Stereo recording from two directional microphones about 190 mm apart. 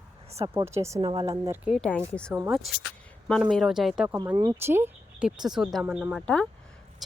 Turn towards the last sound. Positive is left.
turn(degrees=5)  # may be behind; listen again after turning